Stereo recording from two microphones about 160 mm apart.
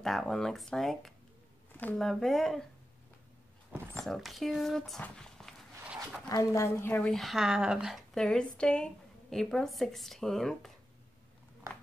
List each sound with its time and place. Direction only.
0.0 s a woman's voice: centre (ahead or behind)
3.9 s a woman's voice: centre (ahead or behind)
6.2 s a woman's voice: 20° left (ahead or behind); by 10.7 s centre (ahead or behind)